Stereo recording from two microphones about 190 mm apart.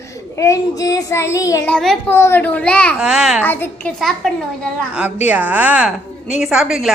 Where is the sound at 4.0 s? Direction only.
Centre (ahead or behind).